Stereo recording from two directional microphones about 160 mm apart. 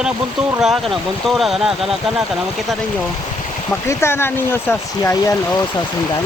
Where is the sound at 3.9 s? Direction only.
15° left (ahead or behind).